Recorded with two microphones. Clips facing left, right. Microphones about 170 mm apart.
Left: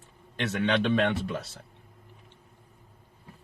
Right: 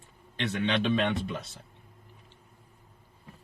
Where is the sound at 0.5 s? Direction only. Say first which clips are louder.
Left 2 dB; 65° left (ahead or behind).